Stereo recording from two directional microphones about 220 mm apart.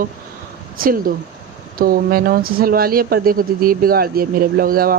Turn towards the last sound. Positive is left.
turn(degrees=-40)  # may be behind; listen again after turning